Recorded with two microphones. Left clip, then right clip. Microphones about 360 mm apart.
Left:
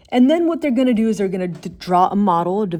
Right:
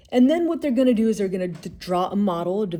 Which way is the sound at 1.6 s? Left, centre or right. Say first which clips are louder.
Left 11 dB; left.